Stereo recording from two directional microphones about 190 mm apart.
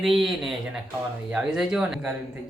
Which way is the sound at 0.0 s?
Centre (ahead or behind).